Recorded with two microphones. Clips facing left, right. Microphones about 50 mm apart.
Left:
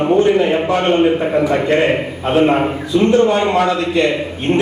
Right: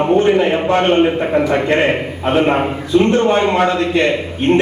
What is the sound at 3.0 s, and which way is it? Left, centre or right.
A man's voice, right.